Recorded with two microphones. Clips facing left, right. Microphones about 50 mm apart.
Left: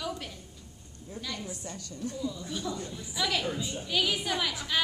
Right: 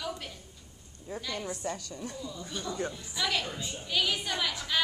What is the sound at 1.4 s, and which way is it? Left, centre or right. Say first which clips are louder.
Speech: right 4 dB; right.